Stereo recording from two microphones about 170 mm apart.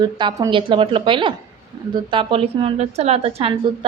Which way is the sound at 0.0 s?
25° right (ahead or behind).